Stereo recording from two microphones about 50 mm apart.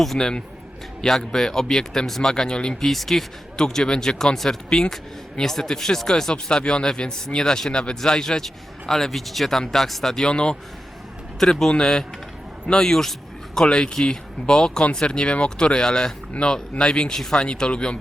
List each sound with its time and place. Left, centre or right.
0.2 s speech: centre
2.8 s speech: centre
10.2 s speech: centre
11.7 s a man's voice: centre